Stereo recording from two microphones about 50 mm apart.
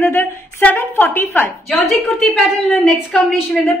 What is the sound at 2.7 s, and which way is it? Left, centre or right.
Speech, left.